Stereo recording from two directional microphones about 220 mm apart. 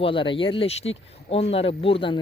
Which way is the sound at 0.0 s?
25° left (ahead or behind).